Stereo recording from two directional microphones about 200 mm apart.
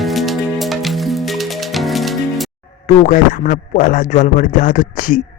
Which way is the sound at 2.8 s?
40° left (ahead or behind).